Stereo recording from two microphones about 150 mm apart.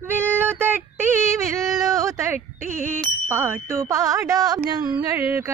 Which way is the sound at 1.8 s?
20° right (ahead or behind).